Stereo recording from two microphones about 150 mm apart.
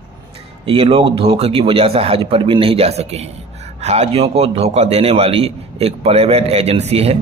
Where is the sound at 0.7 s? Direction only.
40° right (ahead or behind).